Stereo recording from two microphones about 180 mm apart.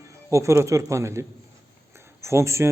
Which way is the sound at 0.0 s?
15° right (ahead or behind).